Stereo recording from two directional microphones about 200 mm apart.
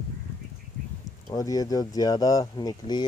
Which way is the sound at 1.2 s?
15° left (ahead or behind).